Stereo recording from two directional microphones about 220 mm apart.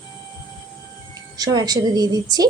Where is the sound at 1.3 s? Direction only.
15° right (ahead or behind).